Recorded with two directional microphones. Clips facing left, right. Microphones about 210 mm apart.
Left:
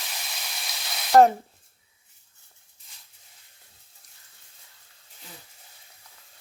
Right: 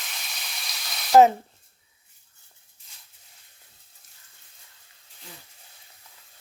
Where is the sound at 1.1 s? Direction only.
Centre (ahead or behind).